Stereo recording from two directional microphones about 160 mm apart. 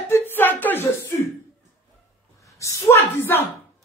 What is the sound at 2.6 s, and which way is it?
Speech, 20° left (ahead or behind).